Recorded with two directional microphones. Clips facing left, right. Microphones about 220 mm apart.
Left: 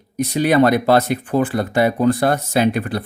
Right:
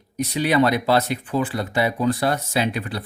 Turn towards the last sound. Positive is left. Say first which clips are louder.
# left 6 dB
turn(degrees=50)  # may be behind; listen again after turning